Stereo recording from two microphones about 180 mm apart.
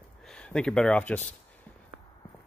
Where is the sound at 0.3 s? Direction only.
5° left (ahead or behind).